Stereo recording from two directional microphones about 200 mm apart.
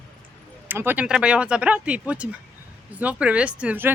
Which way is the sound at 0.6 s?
10° right (ahead or behind).